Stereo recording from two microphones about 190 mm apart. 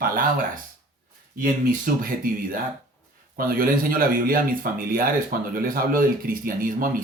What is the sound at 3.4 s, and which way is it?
Speech, 50° right (ahead or behind).